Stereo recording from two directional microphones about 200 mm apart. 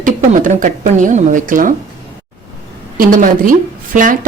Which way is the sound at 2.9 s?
45° right (ahead or behind).